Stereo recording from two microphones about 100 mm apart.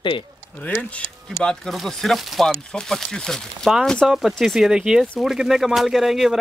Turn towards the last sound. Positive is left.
turn(degrees=-5)  # may be behind; listen again after turning